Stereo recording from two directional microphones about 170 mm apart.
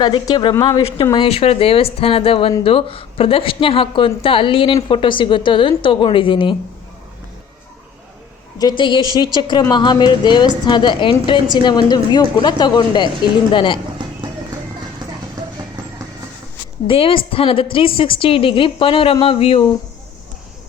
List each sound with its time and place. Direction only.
0.0 s a woman's voice: 25° left (ahead or behind)
8.8 s a woman's voice: 30° left (ahead or behind)
14.0 s clip-clop: 25° right (ahead or behind)
15.4 s clip-clop: 20° right (ahead or behind)
16.8 s a woman's voice: 30° left (ahead or behind)